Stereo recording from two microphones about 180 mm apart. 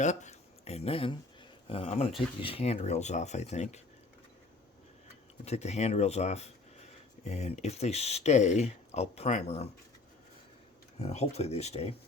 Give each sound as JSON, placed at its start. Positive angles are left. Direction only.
{"t": 0.0, "sound": "speech", "side_deg": 40}
{"t": 5.5, "sound": "speech", "side_deg": 35}
{"t": 11.0, "sound": "speech", "side_deg": 35}